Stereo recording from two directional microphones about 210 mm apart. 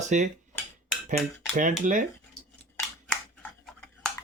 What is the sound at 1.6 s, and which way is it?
Speech, 40° right (ahead or behind).